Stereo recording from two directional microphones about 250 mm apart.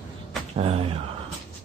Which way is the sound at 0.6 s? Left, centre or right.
Right.